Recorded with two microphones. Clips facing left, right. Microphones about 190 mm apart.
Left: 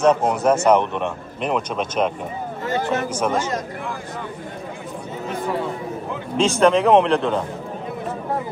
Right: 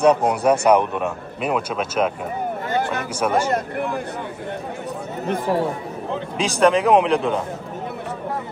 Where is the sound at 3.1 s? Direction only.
10° right (ahead or behind).